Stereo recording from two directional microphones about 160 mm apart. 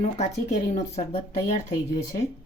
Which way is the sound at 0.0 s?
45° left (ahead or behind).